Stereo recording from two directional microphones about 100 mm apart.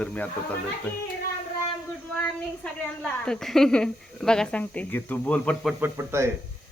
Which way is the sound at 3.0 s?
10° left (ahead or behind).